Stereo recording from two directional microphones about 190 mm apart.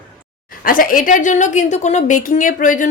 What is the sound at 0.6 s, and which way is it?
A woman's voice, 45° left (ahead or behind).